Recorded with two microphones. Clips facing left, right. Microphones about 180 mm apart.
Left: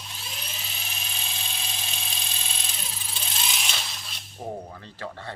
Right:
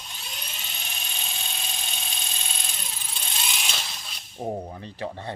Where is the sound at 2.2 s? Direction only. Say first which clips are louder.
Right 1 dB; centre (ahead or behind).